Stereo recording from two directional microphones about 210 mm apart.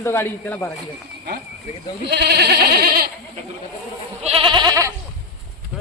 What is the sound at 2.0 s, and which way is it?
Goat, 50° right (ahead or behind).